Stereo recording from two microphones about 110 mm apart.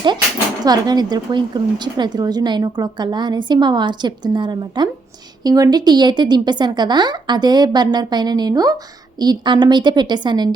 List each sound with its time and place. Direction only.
0.6 s a woman's voice: 40° right (ahead or behind)